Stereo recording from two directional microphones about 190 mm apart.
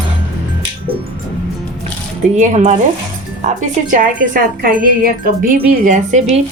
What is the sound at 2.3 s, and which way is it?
Speech, 40° right (ahead or behind).